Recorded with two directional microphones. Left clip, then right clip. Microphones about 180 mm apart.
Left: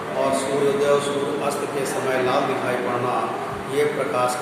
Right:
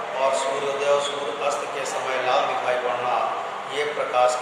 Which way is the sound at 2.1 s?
Centre (ahead or behind).